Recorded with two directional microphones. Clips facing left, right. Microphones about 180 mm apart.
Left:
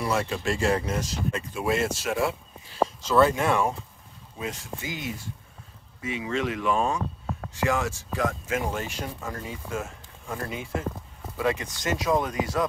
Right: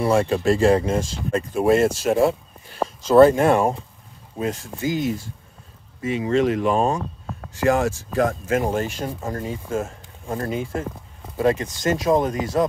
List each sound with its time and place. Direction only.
0.0 s speech: 30° right (ahead or behind)
1.3 s speech: 45° right (ahead or behind)